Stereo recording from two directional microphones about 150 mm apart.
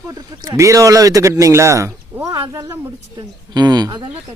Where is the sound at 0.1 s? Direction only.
20° right (ahead or behind).